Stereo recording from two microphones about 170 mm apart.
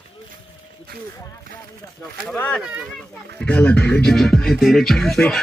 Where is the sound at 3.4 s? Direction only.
5° left (ahead or behind).